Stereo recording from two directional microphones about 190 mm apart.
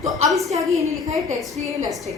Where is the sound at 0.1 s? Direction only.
Centre (ahead or behind).